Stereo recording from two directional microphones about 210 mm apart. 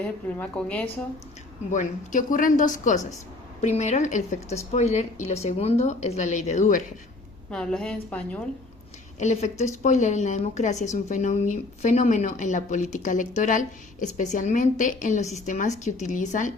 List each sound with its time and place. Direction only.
0.0 s a woman's voice: 5° left (ahead or behind)
1.7 s speech: 35° left (ahead or behind)
7.5 s a woman's voice: 5° left (ahead or behind)
9.1 s speech: 35° left (ahead or behind)